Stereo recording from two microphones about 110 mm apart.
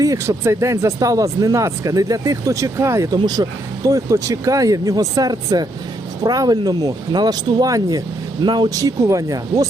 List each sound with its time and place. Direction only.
0.0 s speech: 30° right (ahead or behind)
3.2 s speech: 40° right (ahead or behind)